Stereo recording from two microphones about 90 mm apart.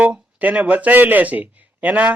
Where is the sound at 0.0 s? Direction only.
15° right (ahead or behind).